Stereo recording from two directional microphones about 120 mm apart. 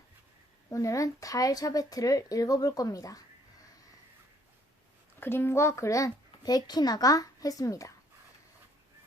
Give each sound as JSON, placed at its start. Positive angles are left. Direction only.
{"t": 0.7, "sound": "speech", "side_deg": 25}
{"t": 5.2, "sound": "speech", "side_deg": 20}